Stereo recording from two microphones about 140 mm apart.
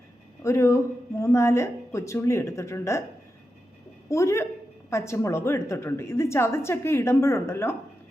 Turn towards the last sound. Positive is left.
turn(degrees=20)  # may be behind; listen again after turning